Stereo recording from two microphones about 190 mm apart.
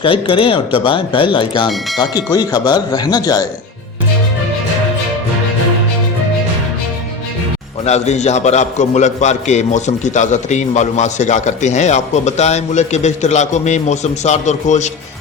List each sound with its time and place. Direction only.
0.0 s speech: 30° left (ahead or behind)
7.9 s a man's voice: 35° left (ahead or behind)